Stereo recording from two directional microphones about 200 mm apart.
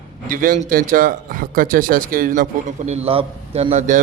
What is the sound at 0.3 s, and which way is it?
A man's voice, 45° right (ahead or behind).